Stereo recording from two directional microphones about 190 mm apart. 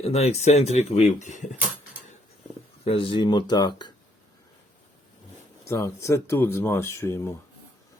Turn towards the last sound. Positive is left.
turn(degrees=15)  # may be behind; listen again after turning